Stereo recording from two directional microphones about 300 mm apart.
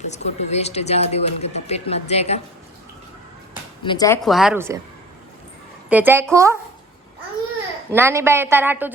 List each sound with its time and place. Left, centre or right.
0.1 s speech: left
3.8 s speech: centre
4.2 s speech: centre
5.9 s a woman's voice: centre
7.9 s a woman's voice: centre